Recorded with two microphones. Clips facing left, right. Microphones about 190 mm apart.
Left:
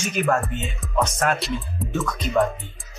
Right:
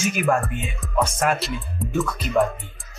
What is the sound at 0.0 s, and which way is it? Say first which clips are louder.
Speech: right 1 dB; 10° right (ahead or behind).